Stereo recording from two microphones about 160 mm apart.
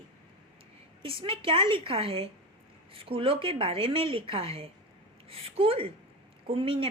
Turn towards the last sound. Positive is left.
turn(degrees=-35)  # may be behind; listen again after turning